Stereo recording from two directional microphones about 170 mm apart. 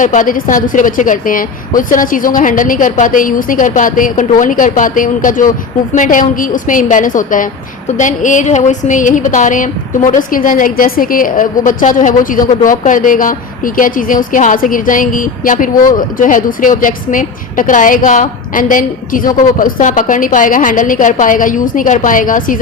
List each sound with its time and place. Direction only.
0.0 s a woman's voice: 50° left (ahead or behind)